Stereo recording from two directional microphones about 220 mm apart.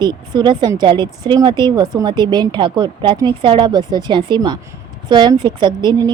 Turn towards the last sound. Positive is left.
turn(degrees=-20)  # may be behind; listen again after turning